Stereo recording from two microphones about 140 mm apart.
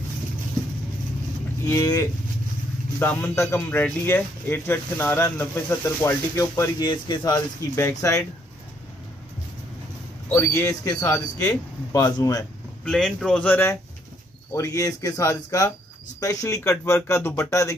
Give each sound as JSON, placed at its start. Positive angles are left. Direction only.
{"t": 1.7, "sound": "a man's voice", "side_deg": 25}
{"t": 10.3, "sound": "speech", "side_deg": 20}
{"t": 12.8, "sound": "speech", "side_deg": 5}